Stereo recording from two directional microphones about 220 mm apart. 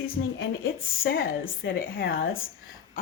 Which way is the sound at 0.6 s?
45° left (ahead or behind).